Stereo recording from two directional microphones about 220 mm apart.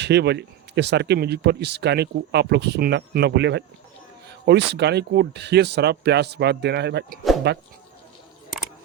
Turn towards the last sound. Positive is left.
turn(degrees=-50)  # may be behind; listen again after turning